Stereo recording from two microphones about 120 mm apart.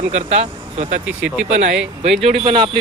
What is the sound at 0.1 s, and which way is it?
Speech, 65° right (ahead or behind).